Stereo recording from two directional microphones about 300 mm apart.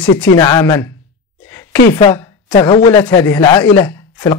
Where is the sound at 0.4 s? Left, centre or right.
Centre.